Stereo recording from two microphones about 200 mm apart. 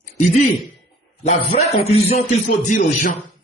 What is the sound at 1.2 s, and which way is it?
A man's voice, 30° left (ahead or behind).